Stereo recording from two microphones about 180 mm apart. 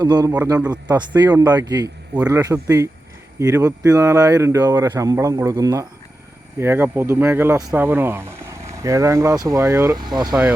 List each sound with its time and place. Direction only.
0.0 s speech: 20° right (ahead or behind)